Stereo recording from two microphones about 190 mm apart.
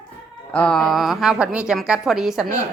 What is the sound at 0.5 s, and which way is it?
A woman's voice, 5° left (ahead or behind).